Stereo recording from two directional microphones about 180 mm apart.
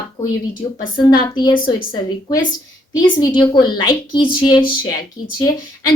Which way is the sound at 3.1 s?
25° left (ahead or behind).